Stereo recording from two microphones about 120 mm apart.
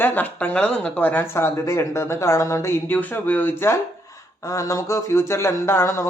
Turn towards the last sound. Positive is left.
turn(degrees=25)  # may be behind; listen again after turning